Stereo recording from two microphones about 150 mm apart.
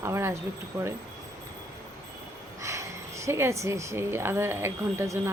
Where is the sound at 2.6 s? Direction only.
20° right (ahead or behind).